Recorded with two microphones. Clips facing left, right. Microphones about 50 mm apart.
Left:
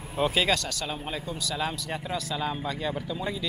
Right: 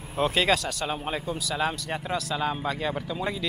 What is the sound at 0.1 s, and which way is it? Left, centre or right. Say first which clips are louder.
Speech: right 2 dB; centre.